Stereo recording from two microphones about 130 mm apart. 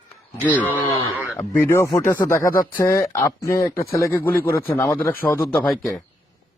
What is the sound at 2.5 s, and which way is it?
Speech, 90° left.